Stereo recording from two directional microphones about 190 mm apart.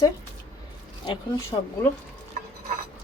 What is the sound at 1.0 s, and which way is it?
Speech, 25° left (ahead or behind).